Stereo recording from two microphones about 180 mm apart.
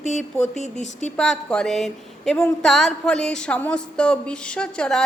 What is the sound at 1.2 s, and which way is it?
A woman's voice, 5° left (ahead or behind).